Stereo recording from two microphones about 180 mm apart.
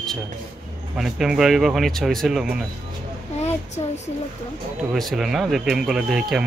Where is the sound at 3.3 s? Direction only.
40° left (ahead or behind).